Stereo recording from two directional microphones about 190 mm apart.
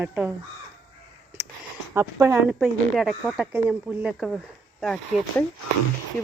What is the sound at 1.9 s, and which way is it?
Speech, 15° right (ahead or behind).